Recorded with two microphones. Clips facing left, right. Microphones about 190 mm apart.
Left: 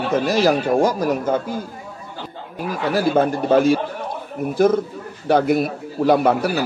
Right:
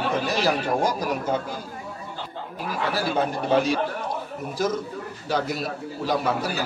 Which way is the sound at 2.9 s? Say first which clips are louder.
Left 9 dB; 45° left (ahead or behind).